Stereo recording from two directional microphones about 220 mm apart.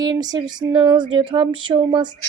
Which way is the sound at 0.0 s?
15° right (ahead or behind).